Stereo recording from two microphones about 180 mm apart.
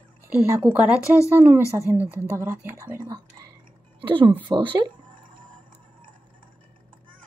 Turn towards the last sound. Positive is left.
turn(degrees=-25)  # may be behind; listen again after turning